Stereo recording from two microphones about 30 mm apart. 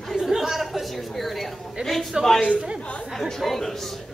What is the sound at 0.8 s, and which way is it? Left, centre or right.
Speech, centre.